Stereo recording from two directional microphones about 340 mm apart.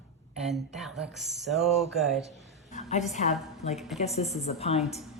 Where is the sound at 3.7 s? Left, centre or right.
Centre.